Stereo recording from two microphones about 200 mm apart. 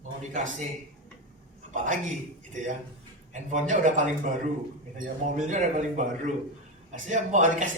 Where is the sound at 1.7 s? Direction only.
40° right (ahead or behind).